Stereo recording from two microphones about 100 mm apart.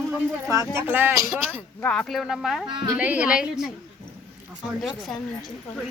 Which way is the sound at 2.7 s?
50° right (ahead or behind).